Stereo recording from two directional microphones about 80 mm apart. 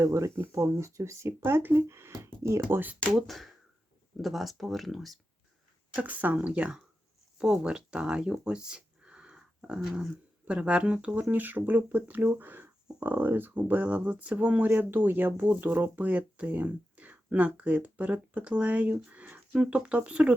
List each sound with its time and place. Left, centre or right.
0.0 s speech: right
2.6 s speech: right
3.1 s speech: centre
6.0 s speech: right